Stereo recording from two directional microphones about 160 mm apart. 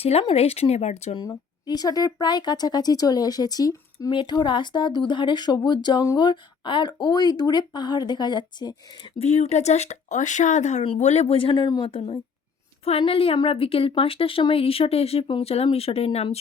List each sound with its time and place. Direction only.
0.0 s speech: 40° left (ahead or behind)
1.1 s speech: 25° left (ahead or behind)
9.1 s speech: 45° left (ahead or behind); by 11.9 s 25° left (ahead or behind)
12.8 s speech: 35° left (ahead or behind)